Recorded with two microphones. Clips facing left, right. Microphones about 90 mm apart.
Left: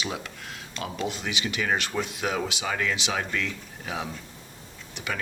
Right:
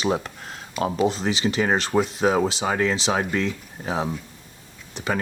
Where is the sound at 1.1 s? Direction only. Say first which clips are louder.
Right 7 dB; 35° right (ahead or behind).